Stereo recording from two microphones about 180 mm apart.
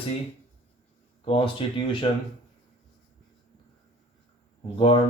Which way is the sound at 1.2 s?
30° left (ahead or behind).